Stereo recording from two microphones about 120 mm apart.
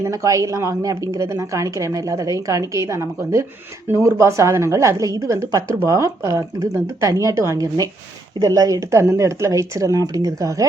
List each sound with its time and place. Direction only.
0.0 s a woman's voice: 25° right (ahead or behind)